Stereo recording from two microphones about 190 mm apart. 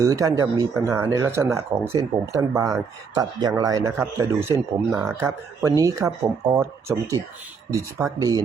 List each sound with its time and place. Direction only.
0.0 s speech: 15° right (ahead or behind)